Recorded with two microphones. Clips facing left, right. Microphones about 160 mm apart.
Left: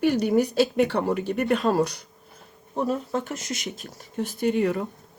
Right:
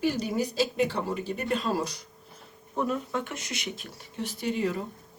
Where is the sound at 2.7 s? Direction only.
35° left (ahead or behind); by 4.9 s 60° left (ahead or behind).